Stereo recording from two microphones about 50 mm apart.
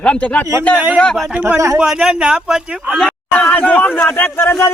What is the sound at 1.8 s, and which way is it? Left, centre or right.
Speech, centre.